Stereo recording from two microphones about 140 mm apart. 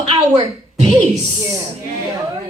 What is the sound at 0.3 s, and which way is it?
Speech, 40° right (ahead or behind).